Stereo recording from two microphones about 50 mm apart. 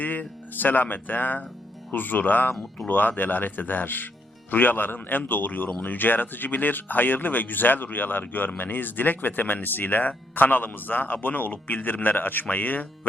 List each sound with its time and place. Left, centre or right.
0.0 s speech: left
2.5 s speech: centre
2.8 s speech: left